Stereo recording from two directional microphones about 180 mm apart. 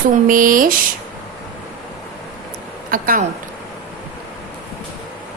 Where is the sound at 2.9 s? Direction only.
50° right (ahead or behind).